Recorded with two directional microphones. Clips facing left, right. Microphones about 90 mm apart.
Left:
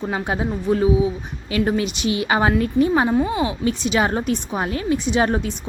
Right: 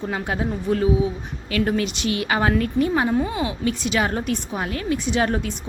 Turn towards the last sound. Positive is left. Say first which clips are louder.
# left 2 dB
turn(degrees=20)  # may be behind; listen again after turning